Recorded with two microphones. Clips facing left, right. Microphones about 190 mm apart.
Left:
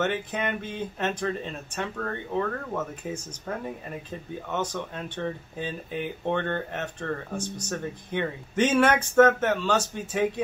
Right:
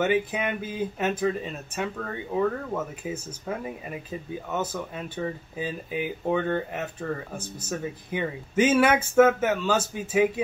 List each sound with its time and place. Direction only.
0.0 s speech: 10° right (ahead or behind)